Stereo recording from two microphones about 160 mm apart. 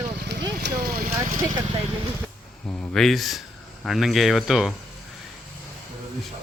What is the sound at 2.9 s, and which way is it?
Speech, centre (ahead or behind).